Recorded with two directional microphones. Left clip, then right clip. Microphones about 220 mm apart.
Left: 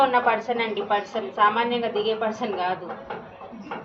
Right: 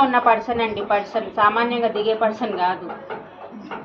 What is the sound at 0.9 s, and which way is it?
A woman's voice, 35° right (ahead or behind).